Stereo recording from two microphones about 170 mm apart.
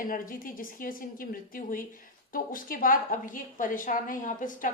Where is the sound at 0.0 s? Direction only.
55° left (ahead or behind).